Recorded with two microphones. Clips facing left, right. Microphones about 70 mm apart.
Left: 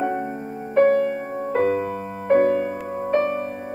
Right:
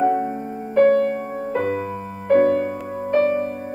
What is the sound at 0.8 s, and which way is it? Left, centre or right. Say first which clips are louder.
Music: right 2 dB; centre.